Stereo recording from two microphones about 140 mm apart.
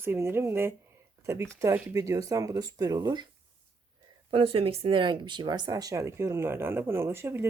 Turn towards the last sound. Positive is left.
turn(degrees=-15)  # may be behind; listen again after turning